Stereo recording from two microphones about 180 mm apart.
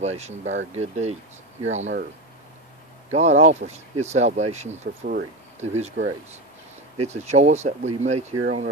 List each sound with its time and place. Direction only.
0.0 s speech: 40° right (ahead or behind)
3.1 s speech: 40° right (ahead or behind)
7.0 s speech: 40° right (ahead or behind)